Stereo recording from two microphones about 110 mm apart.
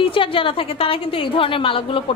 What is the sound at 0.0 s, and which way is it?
A woman's voice, 55° left (ahead or behind).